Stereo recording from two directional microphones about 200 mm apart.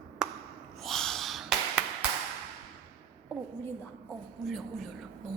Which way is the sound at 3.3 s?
Centre (ahead or behind).